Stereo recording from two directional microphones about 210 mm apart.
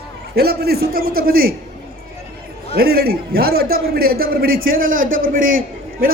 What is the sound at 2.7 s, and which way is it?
A man's voice, 50° right (ahead or behind).